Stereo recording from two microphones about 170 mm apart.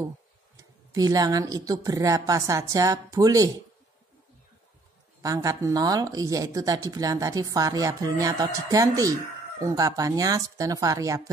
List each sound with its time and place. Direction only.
0.6 s speech: 20° right (ahead or behind)
5.2 s speech: 20° right (ahead or behind)